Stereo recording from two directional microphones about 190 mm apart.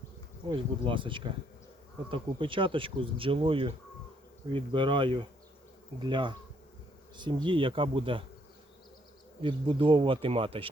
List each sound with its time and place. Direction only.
0.4 s speech: 25° right (ahead or behind)
9.4 s speech: 25° right (ahead or behind)